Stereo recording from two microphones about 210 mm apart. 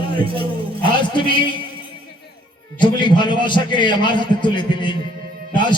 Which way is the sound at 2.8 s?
20° left (ahead or behind).